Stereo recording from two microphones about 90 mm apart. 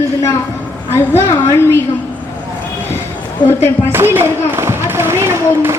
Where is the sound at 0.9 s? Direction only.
30° left (ahead or behind).